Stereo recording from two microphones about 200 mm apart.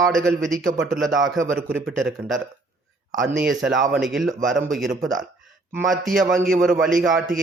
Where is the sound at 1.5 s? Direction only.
5° right (ahead or behind).